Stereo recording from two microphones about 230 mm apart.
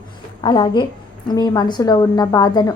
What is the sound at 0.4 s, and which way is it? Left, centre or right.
A woman's voice, left.